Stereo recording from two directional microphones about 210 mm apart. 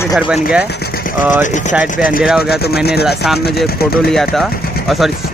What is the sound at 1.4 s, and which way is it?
Speech, 35° left (ahead or behind).